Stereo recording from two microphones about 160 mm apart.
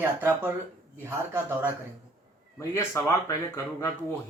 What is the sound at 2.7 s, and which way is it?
Speech, 15° left (ahead or behind).